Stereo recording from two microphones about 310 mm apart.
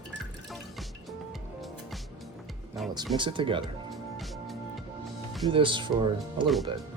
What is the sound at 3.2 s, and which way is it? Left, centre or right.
Speech, centre.